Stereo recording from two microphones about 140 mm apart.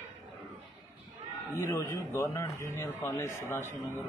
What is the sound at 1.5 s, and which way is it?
A man's voice, 20° left (ahead or behind).